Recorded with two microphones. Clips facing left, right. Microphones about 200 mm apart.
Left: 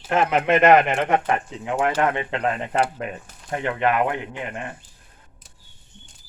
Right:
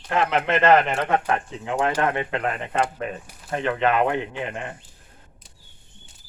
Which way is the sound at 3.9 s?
25° right (ahead or behind).